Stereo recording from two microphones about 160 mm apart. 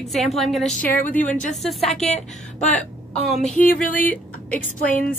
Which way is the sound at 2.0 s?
45° left (ahead or behind).